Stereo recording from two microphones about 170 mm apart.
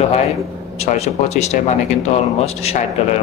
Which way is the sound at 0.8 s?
40° left (ahead or behind).